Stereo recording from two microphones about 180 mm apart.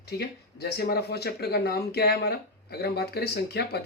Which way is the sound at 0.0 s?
65° left (ahead or behind).